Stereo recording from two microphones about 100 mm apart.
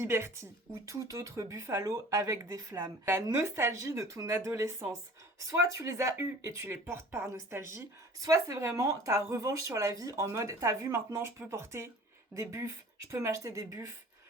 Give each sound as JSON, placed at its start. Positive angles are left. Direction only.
{"t": 0.0, "sound": "speech", "side_deg": -25}
{"t": 8.2, "sound": "speech", "side_deg": -35}